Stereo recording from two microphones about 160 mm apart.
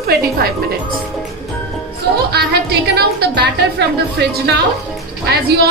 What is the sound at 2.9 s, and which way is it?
Speech, 90° right.